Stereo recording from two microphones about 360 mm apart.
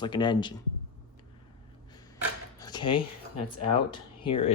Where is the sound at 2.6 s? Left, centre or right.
Centre.